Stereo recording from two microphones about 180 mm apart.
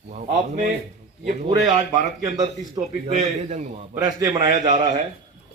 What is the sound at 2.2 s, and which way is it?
Speech, 20° right (ahead or behind).